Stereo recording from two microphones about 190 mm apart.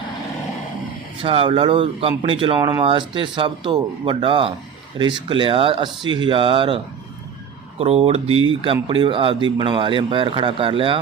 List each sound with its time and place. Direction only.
1.2 s speech: 30° right (ahead or behind)